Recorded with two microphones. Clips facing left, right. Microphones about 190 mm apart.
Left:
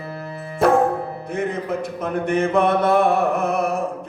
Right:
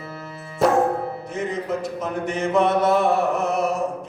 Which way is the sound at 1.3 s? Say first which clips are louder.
Left 3 dB; 55° left (ahead or behind).